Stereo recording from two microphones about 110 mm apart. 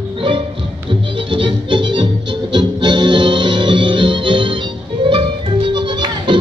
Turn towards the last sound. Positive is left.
turn(degrees=-45)  # may be behind; listen again after turning